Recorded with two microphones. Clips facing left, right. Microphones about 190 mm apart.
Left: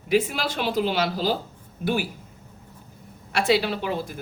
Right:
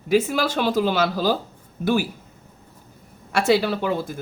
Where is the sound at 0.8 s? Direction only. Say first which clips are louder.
Right 1 dB; 45° right (ahead or behind).